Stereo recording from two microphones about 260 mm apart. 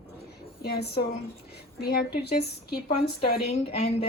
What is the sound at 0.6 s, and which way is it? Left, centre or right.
A woman's voice, left.